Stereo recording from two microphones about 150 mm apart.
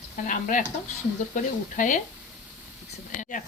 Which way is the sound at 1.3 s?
55° left (ahead or behind).